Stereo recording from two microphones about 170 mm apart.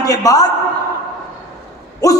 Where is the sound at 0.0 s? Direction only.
20° left (ahead or behind).